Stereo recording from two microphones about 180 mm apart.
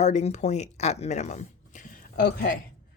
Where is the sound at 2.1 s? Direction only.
55° left (ahead or behind).